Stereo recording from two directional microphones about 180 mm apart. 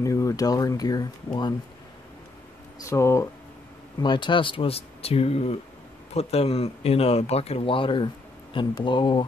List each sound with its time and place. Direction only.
0.0 s speech: 20° left (ahead or behind)
2.8 s speech: 15° left (ahead or behind)
4.0 s speech: 25° left (ahead or behind)